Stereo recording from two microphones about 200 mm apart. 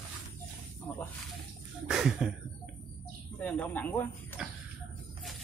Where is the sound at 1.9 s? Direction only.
5° right (ahead or behind).